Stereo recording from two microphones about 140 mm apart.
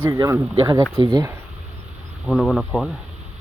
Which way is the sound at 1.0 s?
35° right (ahead or behind).